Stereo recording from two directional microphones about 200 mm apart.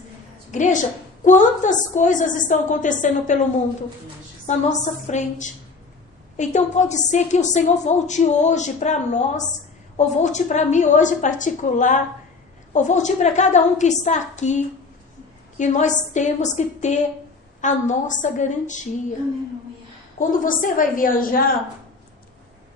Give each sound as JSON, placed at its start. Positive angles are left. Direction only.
{"t": 0.5, "sound": "a woman's voice", "side_deg": 40}
{"t": 4.4, "sound": "a woman's voice", "side_deg": 35}
{"t": 20.1, "sound": "a woman's voice", "side_deg": 40}